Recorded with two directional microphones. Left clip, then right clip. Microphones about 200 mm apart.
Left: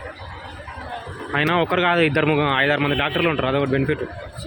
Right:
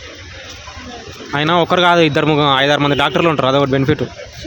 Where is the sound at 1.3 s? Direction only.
30° right (ahead or behind).